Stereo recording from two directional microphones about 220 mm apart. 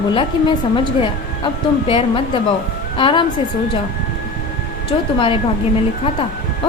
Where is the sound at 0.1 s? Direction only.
25° left (ahead or behind).